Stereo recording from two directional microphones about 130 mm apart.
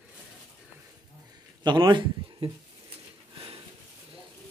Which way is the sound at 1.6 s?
35° right (ahead or behind).